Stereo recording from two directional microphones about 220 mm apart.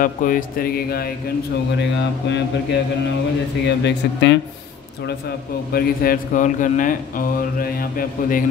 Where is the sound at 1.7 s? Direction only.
50° left (ahead or behind).